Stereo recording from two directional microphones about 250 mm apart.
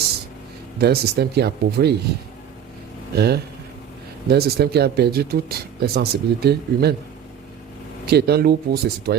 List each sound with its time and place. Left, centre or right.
0.8 s speech: right
3.2 s speech: right
8.0 s speech: right